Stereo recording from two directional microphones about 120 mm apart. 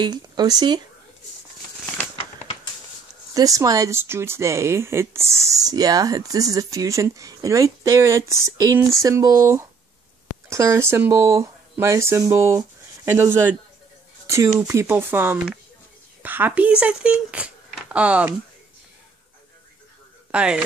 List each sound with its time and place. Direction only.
0.0 s speech: 35° right (ahead or behind)
3.3 s speech: 30° right (ahead or behind); by 18.3 s 10° right (ahead or behind)
20.2 s speech: 10° right (ahead or behind)